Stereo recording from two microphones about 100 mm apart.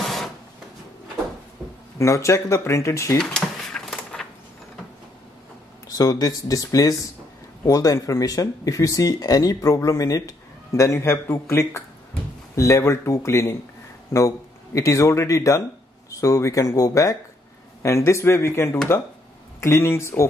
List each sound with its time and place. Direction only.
0.0 s printer: centre (ahead or behind)
2.0 s speech: 30° left (ahead or behind)
3.2 s cash register: 5° left (ahead or behind)
5.9 s speech: 35° left (ahead or behind)